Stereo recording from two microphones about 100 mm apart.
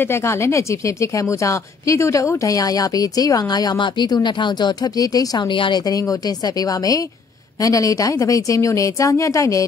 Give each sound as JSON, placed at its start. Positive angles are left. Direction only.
{"t": 0.0, "sound": "a woman's voice", "side_deg": 25}
{"t": 5.5, "sound": "a woman's voice", "side_deg": 50}